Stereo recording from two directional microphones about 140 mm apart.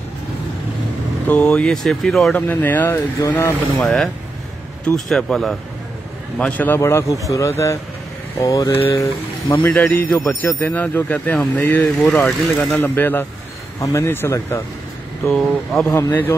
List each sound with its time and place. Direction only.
1.2 s speech: 10° left (ahead or behind)
3.8 s speech: 5° left (ahead or behind)
12.1 s speech: centre (ahead or behind)
12.8 s speech: 15° left (ahead or behind)
15.2 s speech: 5° left (ahead or behind)
15.9 s speech: 15° left (ahead or behind)